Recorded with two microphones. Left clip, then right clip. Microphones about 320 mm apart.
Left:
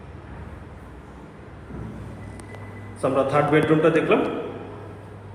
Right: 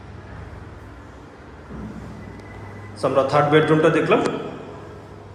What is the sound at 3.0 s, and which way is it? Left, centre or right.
A man's voice, centre.